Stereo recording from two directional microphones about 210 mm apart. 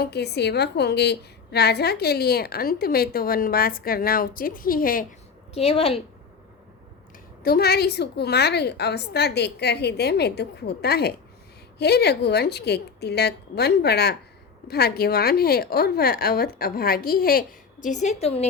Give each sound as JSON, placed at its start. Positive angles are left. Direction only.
{"t": 0.0, "sound": "a woman's voice", "side_deg": 50}
{"t": 5.5, "sound": "a woman's voice", "side_deg": 30}
{"t": 7.4, "sound": "a woman's voice", "side_deg": 45}
{"t": 17.8, "sound": "a woman's voice", "side_deg": 35}